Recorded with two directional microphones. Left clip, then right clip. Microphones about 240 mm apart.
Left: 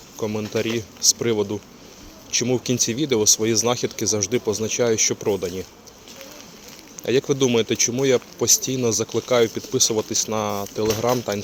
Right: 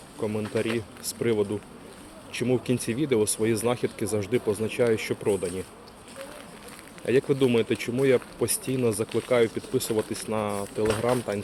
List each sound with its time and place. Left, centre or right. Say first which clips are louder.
0.2 s speech: left 4 dB; left
7.0 s speech: left 3 dB; centre